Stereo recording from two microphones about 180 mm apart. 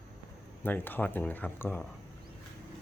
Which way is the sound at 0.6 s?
10° left (ahead or behind).